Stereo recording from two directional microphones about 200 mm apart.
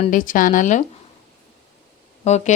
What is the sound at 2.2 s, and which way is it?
Speech, 35° left (ahead or behind).